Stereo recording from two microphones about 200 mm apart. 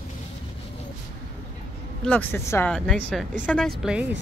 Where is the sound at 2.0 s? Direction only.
10° left (ahead or behind).